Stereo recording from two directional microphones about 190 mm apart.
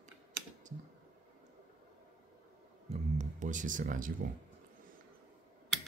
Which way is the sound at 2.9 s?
40° right (ahead or behind).